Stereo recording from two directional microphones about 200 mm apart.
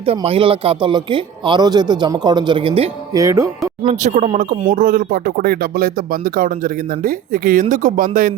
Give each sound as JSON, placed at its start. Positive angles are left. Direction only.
{"t": 0.2, "sound": "speech", "side_deg": -25}
{"t": 3.2, "sound": "music", "side_deg": -15}
{"t": 3.8, "sound": "speech", "side_deg": -40}
{"t": 7.0, "sound": "speech", "side_deg": -45}